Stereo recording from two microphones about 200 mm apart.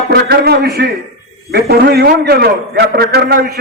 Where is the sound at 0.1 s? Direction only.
50° right (ahead or behind).